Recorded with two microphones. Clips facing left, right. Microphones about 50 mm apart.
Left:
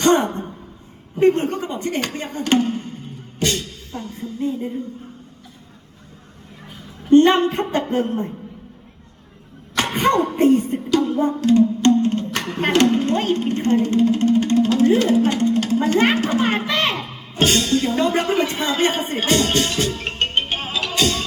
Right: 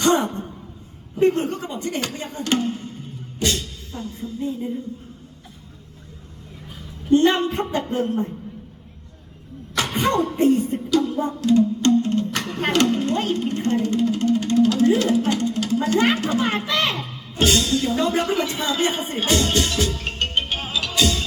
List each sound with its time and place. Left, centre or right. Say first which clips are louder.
0.0 s a sound: left 3 dB; left
1.1 s speech: left 3 dB; left
3.4 s music: left 2 dB; left
7.1 s speech: left 4 dB; left
9.7 s speech: left 3 dB; left
20.5 s music: left 2 dB; left